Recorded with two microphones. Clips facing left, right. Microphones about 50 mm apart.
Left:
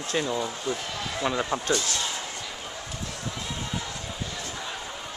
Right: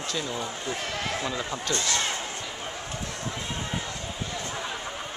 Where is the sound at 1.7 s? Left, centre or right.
Right.